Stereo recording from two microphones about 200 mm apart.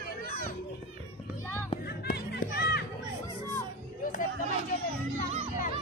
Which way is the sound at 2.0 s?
50° left (ahead or behind).